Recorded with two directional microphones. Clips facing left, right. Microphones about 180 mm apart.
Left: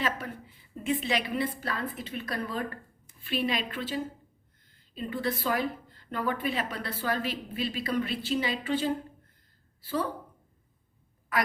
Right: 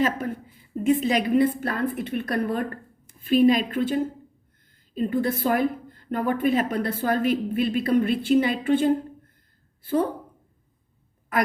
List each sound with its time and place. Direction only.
0.0 s a woman's voice: 45° right (ahead or behind)
3.2 s a woman's voice: 45° right (ahead or behind)